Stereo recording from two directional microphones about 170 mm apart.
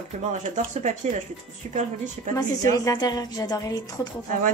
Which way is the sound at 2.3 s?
20° left (ahead or behind).